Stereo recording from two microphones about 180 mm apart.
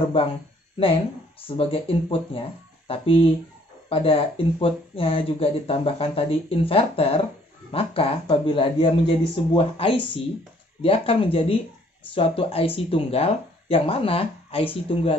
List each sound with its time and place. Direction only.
1.6 s speech: 30° left (ahead or behind)